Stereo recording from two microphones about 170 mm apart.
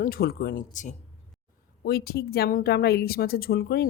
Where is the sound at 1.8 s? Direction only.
65° left (ahead or behind).